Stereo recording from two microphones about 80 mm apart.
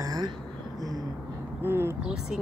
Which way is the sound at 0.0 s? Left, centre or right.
Right.